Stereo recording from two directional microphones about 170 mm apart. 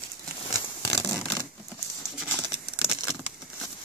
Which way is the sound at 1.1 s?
5° right (ahead or behind).